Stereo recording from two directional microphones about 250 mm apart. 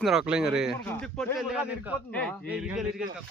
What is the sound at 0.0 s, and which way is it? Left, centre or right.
Speech, centre.